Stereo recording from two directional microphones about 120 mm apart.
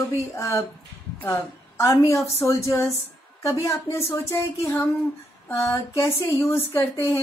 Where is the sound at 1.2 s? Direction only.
20° left (ahead or behind).